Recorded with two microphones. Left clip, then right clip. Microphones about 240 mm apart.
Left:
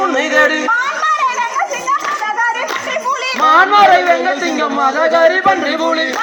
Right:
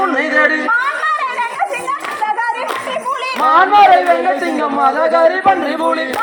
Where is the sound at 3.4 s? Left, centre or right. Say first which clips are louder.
Even; left.